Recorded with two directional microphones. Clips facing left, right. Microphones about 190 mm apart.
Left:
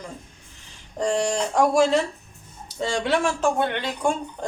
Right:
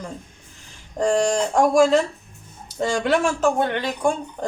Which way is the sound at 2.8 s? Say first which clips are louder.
Right 3 dB; 45° right (ahead or behind).